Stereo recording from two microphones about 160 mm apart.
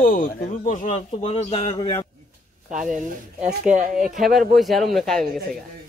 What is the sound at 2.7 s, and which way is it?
Speech, 50° right (ahead or behind).